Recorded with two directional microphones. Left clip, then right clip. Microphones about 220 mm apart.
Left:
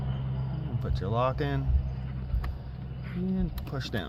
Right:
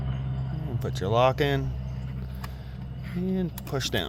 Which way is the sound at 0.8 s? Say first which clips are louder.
Right 7 dB; 40° right (ahead or behind).